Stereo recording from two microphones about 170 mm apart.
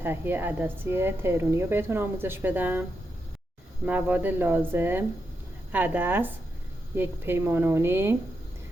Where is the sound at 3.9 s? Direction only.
10° right (ahead or behind).